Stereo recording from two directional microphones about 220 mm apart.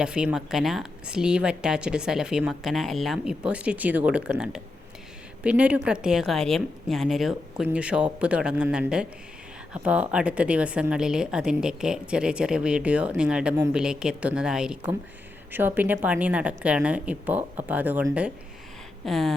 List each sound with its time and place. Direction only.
0.0 s a woman's voice: 5° right (ahead or behind)